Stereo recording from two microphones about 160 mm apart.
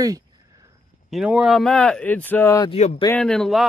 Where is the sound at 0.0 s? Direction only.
20° right (ahead or behind).